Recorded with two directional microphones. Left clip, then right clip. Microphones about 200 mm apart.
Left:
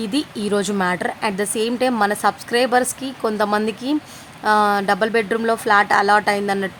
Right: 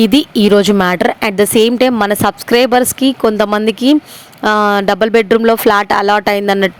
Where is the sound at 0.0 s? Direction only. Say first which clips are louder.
Right 13 dB; 40° right (ahead or behind).